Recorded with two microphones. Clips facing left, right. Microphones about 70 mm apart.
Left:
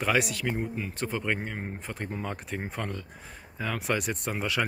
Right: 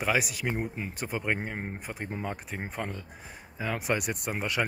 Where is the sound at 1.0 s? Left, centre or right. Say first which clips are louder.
Even; centre.